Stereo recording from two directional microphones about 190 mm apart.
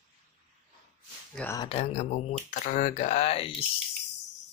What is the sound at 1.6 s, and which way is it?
Speech, 30° left (ahead or behind).